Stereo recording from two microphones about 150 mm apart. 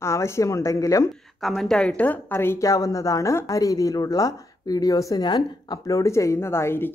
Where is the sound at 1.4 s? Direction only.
Centre (ahead or behind).